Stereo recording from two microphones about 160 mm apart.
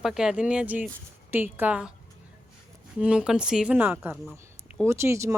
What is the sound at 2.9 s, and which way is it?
Speech, 5° right (ahead or behind).